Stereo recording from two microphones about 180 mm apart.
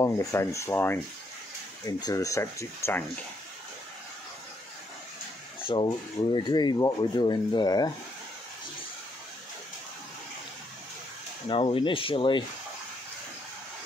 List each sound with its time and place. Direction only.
0.0 s speech: 15° left (ahead or behind)
5.6 s speech: 30° left (ahead or behind)
11.4 s speech: 30° left (ahead or behind)